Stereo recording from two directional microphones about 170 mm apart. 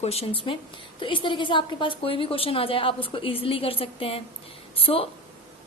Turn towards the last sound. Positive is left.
turn(degrees=35)  # may be behind; listen again after turning